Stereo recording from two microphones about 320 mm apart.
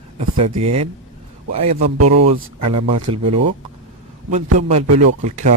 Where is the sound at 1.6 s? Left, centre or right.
Right.